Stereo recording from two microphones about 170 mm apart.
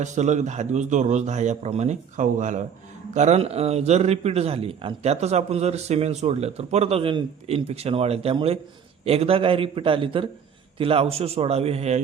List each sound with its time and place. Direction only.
0.0 s a man's voice: 45° right (ahead or behind)